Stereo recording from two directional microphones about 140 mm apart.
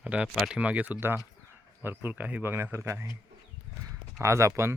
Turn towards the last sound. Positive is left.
turn(degrees=-20)  # may be behind; listen again after turning